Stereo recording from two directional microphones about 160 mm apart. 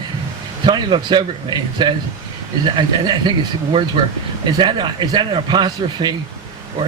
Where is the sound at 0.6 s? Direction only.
30° right (ahead or behind).